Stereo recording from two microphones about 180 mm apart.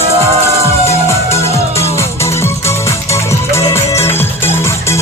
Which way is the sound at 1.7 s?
15° left (ahead or behind).